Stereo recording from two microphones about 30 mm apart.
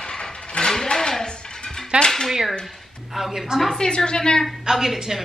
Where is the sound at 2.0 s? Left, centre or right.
Left.